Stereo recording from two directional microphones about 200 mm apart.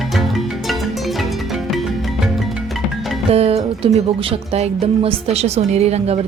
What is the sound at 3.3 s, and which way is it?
Music, 30° right (ahead or behind).